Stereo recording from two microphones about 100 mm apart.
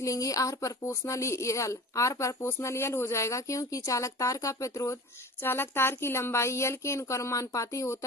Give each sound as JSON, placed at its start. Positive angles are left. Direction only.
{"t": 0.0, "sound": "a woman's voice", "side_deg": 35}